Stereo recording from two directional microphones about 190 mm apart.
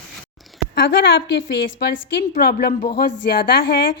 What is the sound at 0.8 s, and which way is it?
A woman's voice, 55° left (ahead or behind).